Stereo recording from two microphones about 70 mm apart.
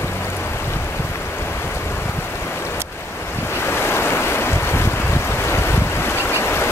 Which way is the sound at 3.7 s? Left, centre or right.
Left.